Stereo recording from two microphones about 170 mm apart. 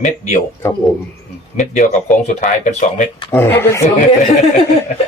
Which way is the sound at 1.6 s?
45° left (ahead or behind).